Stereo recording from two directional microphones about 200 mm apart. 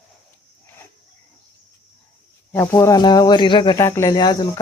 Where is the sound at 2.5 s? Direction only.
15° left (ahead or behind).